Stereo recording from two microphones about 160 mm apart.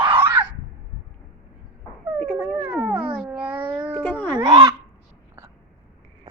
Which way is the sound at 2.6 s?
10° right (ahead or behind).